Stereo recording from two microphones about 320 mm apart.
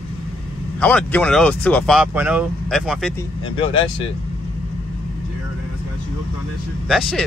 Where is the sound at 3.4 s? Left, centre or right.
Centre.